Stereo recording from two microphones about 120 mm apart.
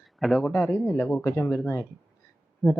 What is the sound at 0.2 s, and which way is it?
Speech, centre (ahead or behind).